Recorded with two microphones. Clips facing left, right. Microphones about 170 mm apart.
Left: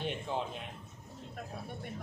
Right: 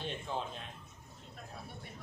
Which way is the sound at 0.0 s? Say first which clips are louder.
Left 3 dB; 15° left (ahead or behind).